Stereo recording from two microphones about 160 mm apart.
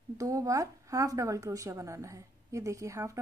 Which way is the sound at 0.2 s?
20° right (ahead or behind).